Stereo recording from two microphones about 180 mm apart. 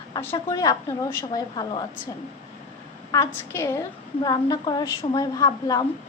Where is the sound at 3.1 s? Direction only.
15° left (ahead or behind).